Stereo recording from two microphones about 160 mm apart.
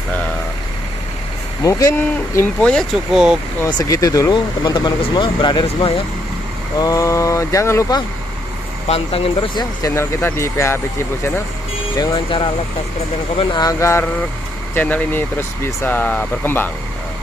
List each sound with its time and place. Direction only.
1.6 s speech: 20° left (ahead or behind); by 3.3 s 5° right (ahead or behind)
3.6 s speech: 20° left (ahead or behind)
6.8 s speech: 20° left (ahead or behind)
8.8 s speech: 40° left (ahead or behind)
9.8 s speech: 15° left (ahead or behind)
12.0 s speech: 30° left (ahead or behind); by 16.7 s 10° left (ahead or behind)